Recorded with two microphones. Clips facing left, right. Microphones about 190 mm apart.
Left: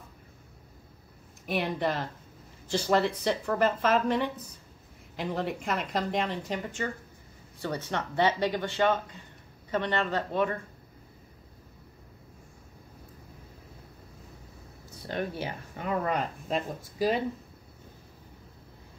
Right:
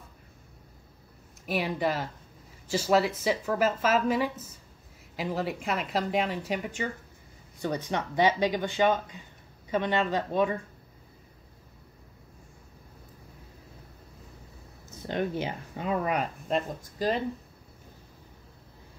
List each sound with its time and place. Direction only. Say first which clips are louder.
1.4 s a woman's voice: right 1 dB; centre (ahead or behind)
15.0 s speech: right 3 dB; 20° right (ahead or behind)
16.4 s a woman's voice: right 2 dB; 5° left (ahead or behind)